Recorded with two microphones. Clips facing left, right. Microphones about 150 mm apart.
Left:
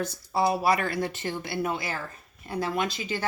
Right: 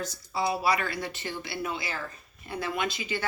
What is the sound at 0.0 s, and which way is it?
Speech, 50° left (ahead or behind).